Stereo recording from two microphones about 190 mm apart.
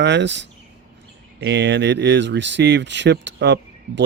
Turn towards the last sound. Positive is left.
turn(degrees=-65)  # may be behind; listen again after turning